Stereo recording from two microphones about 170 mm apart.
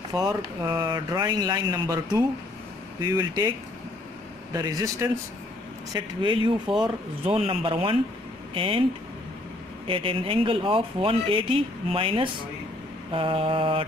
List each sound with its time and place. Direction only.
0.1 s speech: 25° right (ahead or behind)
4.6 s speech: 20° right (ahead or behind)
5.9 s speech: 30° right (ahead or behind)
9.8 s speech: 30° right (ahead or behind)